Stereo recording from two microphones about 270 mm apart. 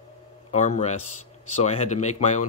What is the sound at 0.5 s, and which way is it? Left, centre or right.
Speech, left.